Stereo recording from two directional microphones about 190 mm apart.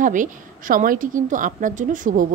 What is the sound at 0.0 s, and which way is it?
A woman's voice, 45° right (ahead or behind).